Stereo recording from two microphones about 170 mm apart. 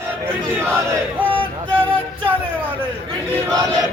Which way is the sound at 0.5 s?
15° right (ahead or behind).